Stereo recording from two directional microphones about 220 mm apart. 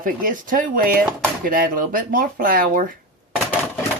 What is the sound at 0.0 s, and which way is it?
Speech, 40° right (ahead or behind).